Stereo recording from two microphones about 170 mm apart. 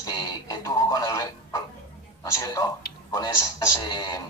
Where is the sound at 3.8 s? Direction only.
25° left (ahead or behind).